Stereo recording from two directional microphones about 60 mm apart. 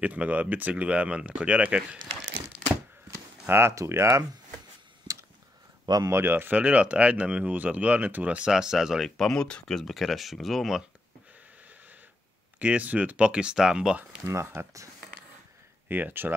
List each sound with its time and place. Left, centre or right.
0.0 s speech: right
3.4 s speech: right
3.7 s speech: right
5.1 s a sound: right
6.0 s speech: right
6.3 s speech: right
8.5 s speech: centre
9.1 s speech: centre
12.5 s speech: right
14.2 s speech: right
15.9 s speech: right